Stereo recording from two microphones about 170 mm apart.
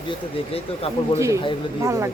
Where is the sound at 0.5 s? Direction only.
35° left (ahead or behind).